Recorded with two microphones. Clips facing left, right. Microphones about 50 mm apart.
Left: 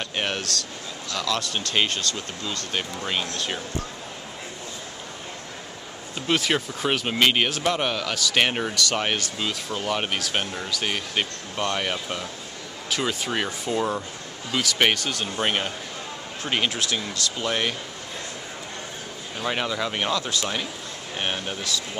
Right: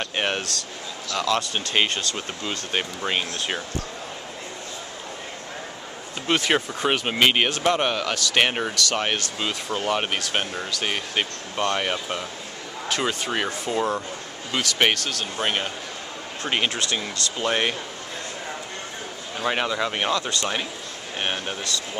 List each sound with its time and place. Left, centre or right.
0.0 s speech: centre
2.1 s speech: right
6.2 s speech: centre
9.4 s speech: centre
19.4 s speech: centre